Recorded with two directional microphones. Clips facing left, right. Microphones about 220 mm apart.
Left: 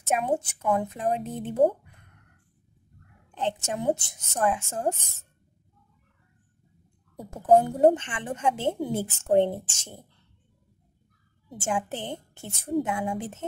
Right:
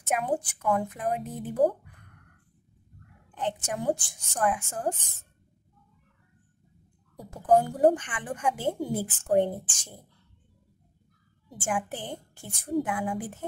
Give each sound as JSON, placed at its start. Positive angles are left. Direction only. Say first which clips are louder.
{"t": 0.0, "sound": "a woman's voice", "louder": "left 2 dB", "side_deg": 25}
{"t": 3.3, "sound": "a woman's voice", "louder": "left 2 dB", "side_deg": 25}
{"t": 7.2, "sound": "a woman's voice", "louder": "left 3 dB", "side_deg": 25}
{"t": 11.4, "sound": "a woman's voice", "louder": "left 2 dB", "side_deg": 25}